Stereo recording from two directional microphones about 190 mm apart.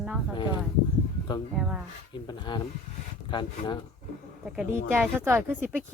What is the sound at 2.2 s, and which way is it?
Speech, 25° left (ahead or behind).